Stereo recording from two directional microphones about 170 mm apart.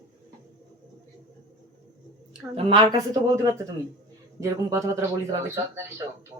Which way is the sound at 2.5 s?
30° right (ahead or behind).